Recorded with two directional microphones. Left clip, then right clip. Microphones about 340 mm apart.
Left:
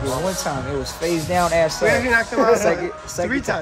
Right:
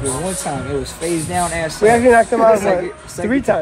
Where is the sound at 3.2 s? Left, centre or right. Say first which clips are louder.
Right 7 dB; centre.